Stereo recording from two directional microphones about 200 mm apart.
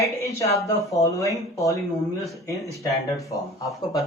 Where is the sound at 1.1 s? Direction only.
15° left (ahead or behind).